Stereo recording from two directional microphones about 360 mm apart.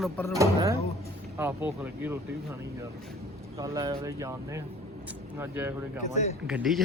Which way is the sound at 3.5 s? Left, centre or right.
Centre.